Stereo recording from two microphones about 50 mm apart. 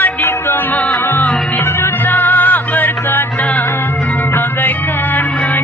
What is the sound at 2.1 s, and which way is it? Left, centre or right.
Music, left.